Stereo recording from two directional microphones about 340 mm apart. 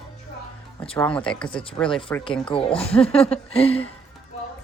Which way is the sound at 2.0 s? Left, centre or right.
Centre.